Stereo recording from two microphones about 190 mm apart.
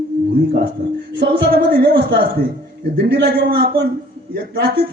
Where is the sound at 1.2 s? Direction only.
60° right (ahead or behind).